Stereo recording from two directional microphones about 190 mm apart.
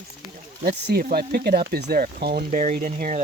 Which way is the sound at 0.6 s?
55° right (ahead or behind).